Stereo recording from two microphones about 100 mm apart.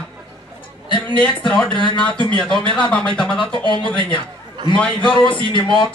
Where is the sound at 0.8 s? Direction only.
55° left (ahead or behind).